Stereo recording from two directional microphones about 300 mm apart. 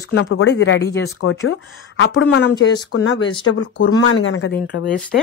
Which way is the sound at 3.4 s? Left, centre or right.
Left.